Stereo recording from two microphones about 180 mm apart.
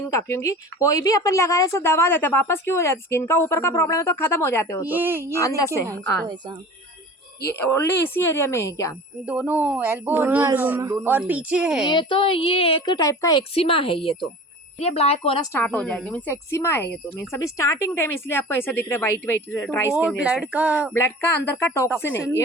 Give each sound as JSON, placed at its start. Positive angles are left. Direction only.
{"t": 0.1, "sound": "speech", "side_deg": 15}
{"t": 4.9, "sound": "speech", "side_deg": -10}
{"t": 5.4, "sound": "speech", "side_deg": 20}
{"t": 5.9, "sound": "a woman's voice", "side_deg": -25}
{"t": 7.4, "sound": "speech", "side_deg": 15}
{"t": 9.2, "sound": "speech", "side_deg": -10}
{"t": 11.9, "sound": "a woman's voice", "side_deg": 25}
{"t": 13.5, "sound": "speech", "side_deg": 30}
{"t": 15.5, "sound": "speech", "side_deg": 10}
{"t": 19.9, "sound": "speech", "side_deg": -5}
{"t": 20.9, "sound": "speech", "side_deg": 15}